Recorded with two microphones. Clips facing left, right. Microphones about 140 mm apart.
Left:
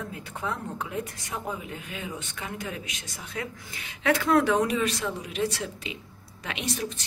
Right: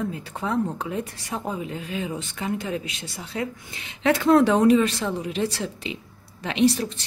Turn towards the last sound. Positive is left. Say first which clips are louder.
# right 11 dB
turn(degrees=-30)  # may be behind; listen again after turning